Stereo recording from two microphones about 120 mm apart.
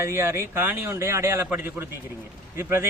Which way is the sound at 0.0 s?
25° right (ahead or behind).